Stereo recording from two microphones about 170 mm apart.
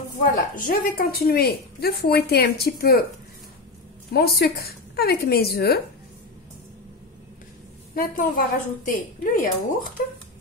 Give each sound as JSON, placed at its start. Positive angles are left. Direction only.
{"t": 0.6, "sound": "a woman's voice", "side_deg": 55}
{"t": 4.1, "sound": "speech", "side_deg": 65}
{"t": 7.9, "sound": "a woman's voice", "side_deg": 55}